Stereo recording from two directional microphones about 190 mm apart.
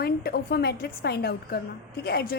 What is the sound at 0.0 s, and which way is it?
A woman's voice, 55° left (ahead or behind).